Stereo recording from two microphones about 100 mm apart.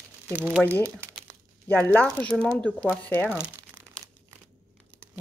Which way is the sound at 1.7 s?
15° left (ahead or behind).